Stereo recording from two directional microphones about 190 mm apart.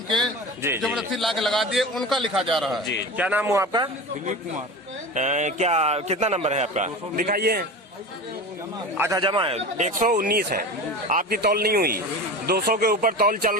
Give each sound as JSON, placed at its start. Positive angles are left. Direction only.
{"t": 0.8, "sound": "a man's voice", "side_deg": 0}
{"t": 5.1, "sound": "a man's voice", "side_deg": -40}
{"t": 9.0, "sound": "a man's voice", "side_deg": -15}